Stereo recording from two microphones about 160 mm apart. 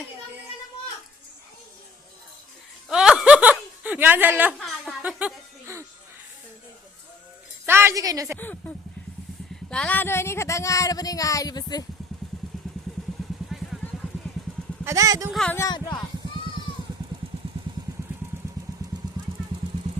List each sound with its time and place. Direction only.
2.9 s snicker: 5° right (ahead or behind)
4.5 s a sound: 5° left (ahead or behind)
5.0 s music: 10° right (ahead or behind)
7.6 s speech: 15° right (ahead or behind)
8.4 s speech: 10° left (ahead or behind)
14.8 s speech: 20° right (ahead or behind)
15.3 s speech: 5° left (ahead or behind)
15.5 s speech: 25° left (ahead or behind)
18.7 s vehicle: 20° right (ahead or behind)